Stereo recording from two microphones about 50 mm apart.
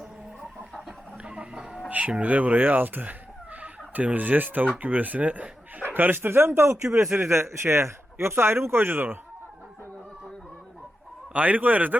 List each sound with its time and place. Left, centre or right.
1.2 s music: right
1.9 s speech: right
5.8 s a man's voice: right
11.3 s speech: right